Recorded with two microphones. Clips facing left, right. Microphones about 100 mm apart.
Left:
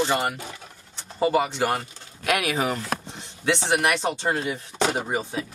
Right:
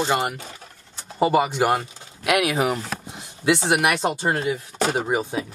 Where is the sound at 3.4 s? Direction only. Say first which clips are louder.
Right 3 dB; 10° right (ahead or behind).